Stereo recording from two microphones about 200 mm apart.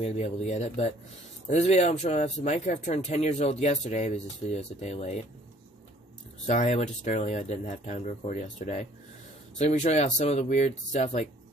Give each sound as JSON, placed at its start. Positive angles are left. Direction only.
{"t": 0.0, "sound": "speech", "side_deg": 35}
{"t": 6.4, "sound": "speech", "side_deg": 35}